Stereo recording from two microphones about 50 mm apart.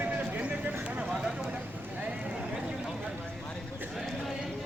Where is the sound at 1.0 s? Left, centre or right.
Centre.